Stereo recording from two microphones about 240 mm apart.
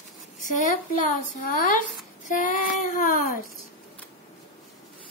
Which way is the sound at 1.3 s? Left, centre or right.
Left.